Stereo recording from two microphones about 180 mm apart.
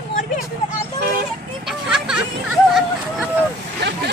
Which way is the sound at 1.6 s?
5° right (ahead or behind).